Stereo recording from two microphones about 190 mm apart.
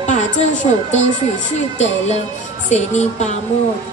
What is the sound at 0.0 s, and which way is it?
A woman's voice, 40° left (ahead or behind).